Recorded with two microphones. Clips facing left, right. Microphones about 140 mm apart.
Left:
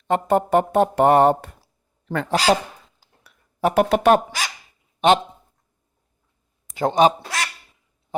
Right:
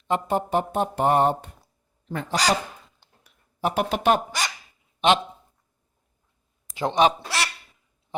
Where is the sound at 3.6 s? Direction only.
60° left (ahead or behind).